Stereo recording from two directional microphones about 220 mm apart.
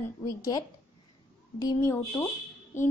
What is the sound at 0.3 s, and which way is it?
A woman's voice, 15° left (ahead or behind).